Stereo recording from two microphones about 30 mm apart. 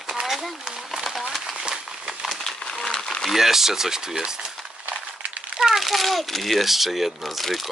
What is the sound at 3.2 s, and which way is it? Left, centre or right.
Speech, centre.